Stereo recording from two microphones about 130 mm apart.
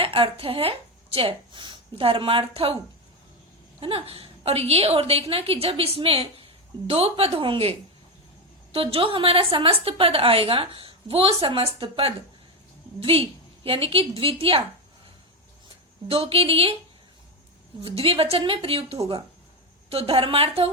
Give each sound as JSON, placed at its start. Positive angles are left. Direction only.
{"t": 0.0, "sound": "speech", "side_deg": -45}
{"t": 3.8, "sound": "a woman's voice", "side_deg": -45}
{"t": 16.0, "sound": "a woman's voice", "side_deg": -45}
{"t": 17.8, "sound": "a woman's voice", "side_deg": -45}